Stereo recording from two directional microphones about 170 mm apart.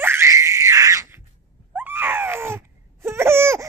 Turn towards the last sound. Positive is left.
turn(degrees=-15)  # may be behind; listen again after turning